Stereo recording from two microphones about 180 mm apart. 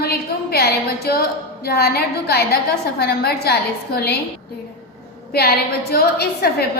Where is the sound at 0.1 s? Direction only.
60° left (ahead or behind).